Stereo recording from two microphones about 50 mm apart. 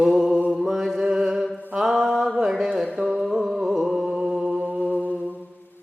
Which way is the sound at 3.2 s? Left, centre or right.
Centre.